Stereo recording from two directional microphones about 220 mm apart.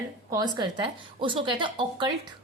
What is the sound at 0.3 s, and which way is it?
A woman's voice, 15° right (ahead or behind).